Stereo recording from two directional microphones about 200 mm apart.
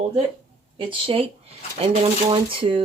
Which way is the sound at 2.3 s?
25° right (ahead or behind).